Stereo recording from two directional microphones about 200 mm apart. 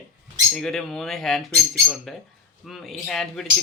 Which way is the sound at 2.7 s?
Centre (ahead or behind).